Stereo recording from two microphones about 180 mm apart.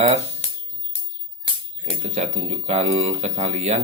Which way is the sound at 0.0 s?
35° right (ahead or behind).